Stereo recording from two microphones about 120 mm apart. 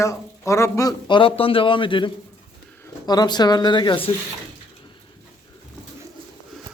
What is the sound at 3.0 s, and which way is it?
Speech, 35° left (ahead or behind).